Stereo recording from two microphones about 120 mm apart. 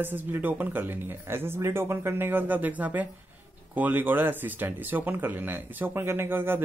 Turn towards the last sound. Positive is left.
turn(degrees=-15)  # may be behind; listen again after turning